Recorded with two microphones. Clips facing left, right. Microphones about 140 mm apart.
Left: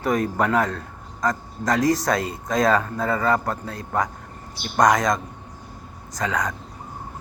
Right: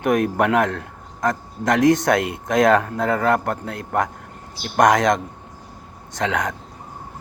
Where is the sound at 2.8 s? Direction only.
65° right (ahead or behind).